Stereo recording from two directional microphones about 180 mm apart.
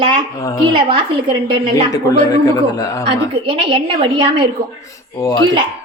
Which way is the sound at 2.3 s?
20° left (ahead or behind).